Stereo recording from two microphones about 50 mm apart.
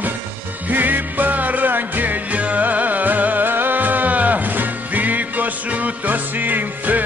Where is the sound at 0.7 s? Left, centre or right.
Right.